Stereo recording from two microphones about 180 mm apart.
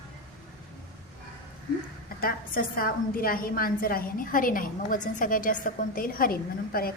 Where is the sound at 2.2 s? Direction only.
55° left (ahead or behind).